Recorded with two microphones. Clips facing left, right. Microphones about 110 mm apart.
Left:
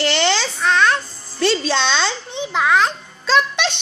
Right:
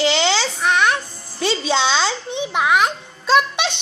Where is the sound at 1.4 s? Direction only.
15° right (ahead or behind).